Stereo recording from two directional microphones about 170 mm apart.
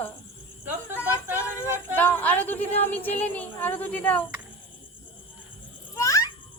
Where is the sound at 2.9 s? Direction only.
10° left (ahead or behind).